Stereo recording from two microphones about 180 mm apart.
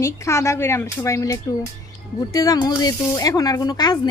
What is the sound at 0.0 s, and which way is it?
Speech, 15° left (ahead or behind).